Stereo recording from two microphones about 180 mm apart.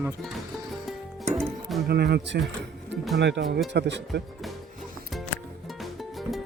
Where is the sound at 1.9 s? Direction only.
65° right (ahead or behind).